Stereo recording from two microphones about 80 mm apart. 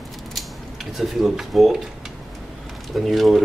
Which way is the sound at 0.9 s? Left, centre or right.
Centre.